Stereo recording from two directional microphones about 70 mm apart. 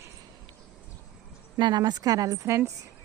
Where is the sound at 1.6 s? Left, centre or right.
Right.